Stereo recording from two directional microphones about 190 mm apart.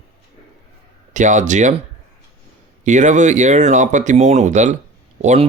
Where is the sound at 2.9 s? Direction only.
40° right (ahead or behind).